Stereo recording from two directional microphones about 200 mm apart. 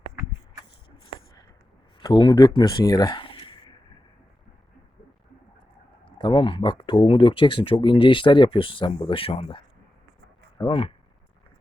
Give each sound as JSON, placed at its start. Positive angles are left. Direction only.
{"t": 2.0, "sound": "speech", "side_deg": 20}
{"t": 6.1, "sound": "speech", "side_deg": 25}
{"t": 10.6, "sound": "speech", "side_deg": 30}